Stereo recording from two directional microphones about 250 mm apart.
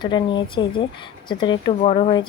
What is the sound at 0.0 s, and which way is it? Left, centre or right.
A woman's voice, centre.